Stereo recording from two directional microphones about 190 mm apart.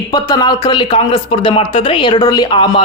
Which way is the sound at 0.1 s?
20° left (ahead or behind).